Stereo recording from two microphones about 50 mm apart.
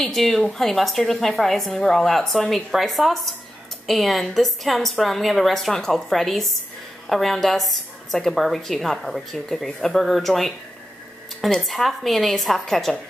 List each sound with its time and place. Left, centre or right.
0.0 s a woman's voice: centre
11.6 s a woman's voice: centre